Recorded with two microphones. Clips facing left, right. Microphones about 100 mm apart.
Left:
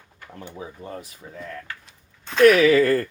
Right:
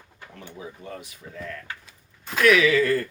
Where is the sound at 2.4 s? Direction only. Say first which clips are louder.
Left 4 dB; 40° left (ahead or behind).